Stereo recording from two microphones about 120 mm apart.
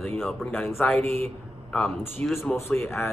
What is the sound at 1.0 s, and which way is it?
Speech, 60° right (ahead or behind).